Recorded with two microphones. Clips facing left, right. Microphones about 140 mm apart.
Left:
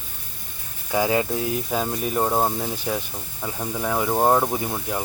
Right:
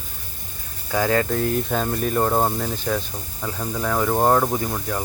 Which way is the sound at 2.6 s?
15° left (ahead or behind).